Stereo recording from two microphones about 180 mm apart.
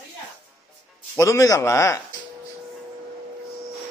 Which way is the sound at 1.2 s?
15° left (ahead or behind).